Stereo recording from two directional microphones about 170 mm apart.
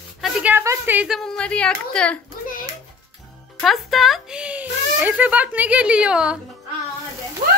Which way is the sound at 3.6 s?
Centre (ahead or behind).